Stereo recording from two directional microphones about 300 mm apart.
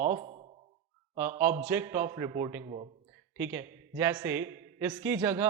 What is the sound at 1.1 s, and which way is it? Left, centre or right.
A man's voice, centre.